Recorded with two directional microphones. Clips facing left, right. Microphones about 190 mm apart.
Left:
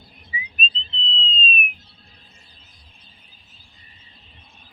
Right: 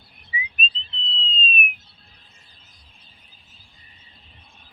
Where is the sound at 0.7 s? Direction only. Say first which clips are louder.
Left 4 dB; 30° left (ahead or behind).